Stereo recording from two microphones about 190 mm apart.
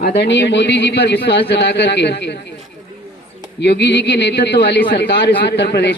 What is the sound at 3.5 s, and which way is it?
A man's voice, 65° left (ahead or behind).